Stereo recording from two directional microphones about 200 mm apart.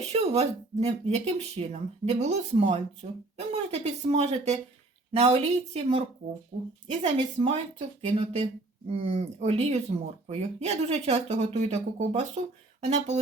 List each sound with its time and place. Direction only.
0.1 s speech: 30° right (ahead or behind)
7.0 s speech: 30° right (ahead or behind)